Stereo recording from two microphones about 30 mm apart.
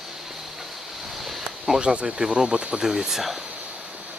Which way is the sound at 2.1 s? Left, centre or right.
Centre.